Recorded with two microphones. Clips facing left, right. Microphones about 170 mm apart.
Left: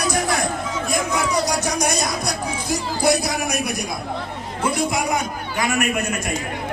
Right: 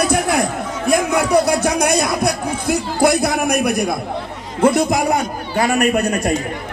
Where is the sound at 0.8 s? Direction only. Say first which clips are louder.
Right 8 dB; 60° right (ahead or behind).